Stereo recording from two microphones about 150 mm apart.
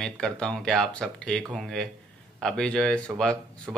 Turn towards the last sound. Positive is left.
turn(degrees=5)  # may be behind; listen again after turning